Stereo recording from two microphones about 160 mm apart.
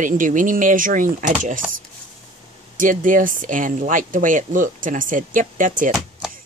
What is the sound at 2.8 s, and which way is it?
Speech, 55° right (ahead or behind).